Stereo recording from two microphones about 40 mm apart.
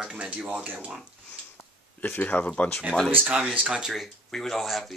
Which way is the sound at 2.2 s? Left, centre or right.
Left.